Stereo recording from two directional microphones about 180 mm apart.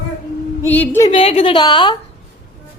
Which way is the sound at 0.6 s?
10° left (ahead or behind).